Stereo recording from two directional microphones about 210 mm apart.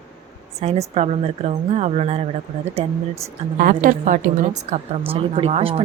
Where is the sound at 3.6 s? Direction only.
40° right (ahead or behind).